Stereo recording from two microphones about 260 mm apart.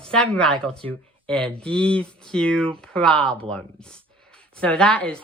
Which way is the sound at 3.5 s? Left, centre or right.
Centre.